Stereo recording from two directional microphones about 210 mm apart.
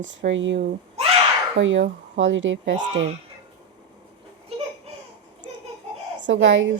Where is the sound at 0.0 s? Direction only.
60° right (ahead or behind).